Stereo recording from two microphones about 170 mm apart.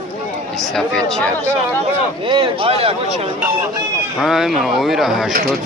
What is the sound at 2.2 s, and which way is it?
Speech, 30° right (ahead or behind).